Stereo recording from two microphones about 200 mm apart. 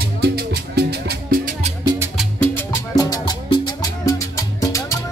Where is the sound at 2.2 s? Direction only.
5° left (ahead or behind).